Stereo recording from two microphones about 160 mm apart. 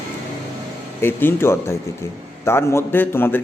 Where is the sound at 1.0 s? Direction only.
15° left (ahead or behind).